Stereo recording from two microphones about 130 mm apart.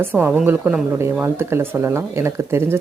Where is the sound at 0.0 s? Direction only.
15° right (ahead or behind).